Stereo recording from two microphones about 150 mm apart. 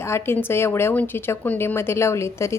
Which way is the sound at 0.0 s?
15° left (ahead or behind).